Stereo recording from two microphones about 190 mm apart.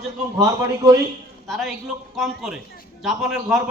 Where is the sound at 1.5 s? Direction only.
Centre (ahead or behind).